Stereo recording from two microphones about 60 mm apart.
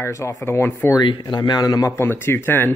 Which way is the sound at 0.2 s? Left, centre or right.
Left.